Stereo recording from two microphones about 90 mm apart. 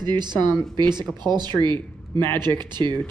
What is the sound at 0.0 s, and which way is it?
Speech, 55° right (ahead or behind).